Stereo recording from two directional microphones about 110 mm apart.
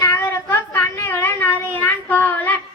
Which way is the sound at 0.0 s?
35° left (ahead or behind).